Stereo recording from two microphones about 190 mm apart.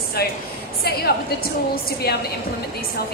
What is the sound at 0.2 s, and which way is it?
Speech, 55° left (ahead or behind).